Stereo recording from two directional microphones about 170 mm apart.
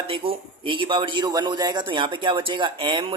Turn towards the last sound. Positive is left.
turn(degrees=-30)  # may be behind; listen again after turning